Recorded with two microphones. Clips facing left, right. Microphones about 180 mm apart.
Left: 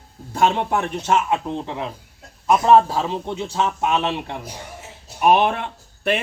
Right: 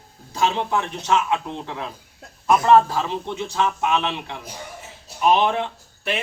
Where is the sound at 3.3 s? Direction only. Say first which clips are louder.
Right 2 dB; 40° left (ahead or behind).